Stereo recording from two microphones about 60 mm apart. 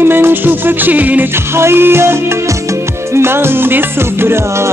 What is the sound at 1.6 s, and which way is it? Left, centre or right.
Music, right.